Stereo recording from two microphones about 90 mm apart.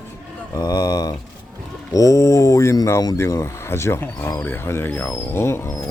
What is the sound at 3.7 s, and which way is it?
Speech, 30° left (ahead or behind).